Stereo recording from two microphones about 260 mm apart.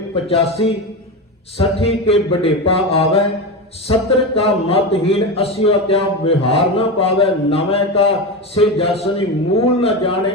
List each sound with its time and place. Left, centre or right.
0.3 s a man's voice: left
4.4 s a man's voice: left